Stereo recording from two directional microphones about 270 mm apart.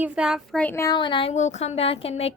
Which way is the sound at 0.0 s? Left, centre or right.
Centre.